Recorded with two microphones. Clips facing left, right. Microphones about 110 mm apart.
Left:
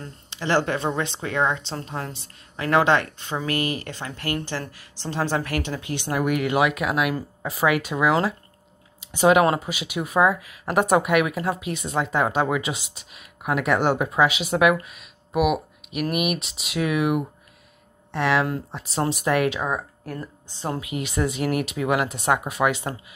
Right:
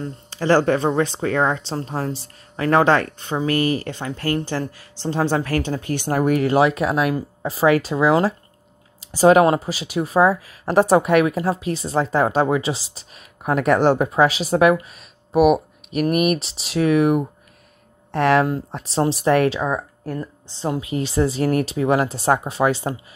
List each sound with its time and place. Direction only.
0.3 s a woman's voice: 40° right (ahead or behind)
5.7 s a woman's voice: 45° right (ahead or behind)
18.4 s a woman's voice: 30° right (ahead or behind)
20.8 s a woman's voice: 30° right (ahead or behind)